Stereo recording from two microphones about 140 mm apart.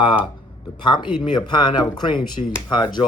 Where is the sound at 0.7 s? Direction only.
35° left (ahead or behind).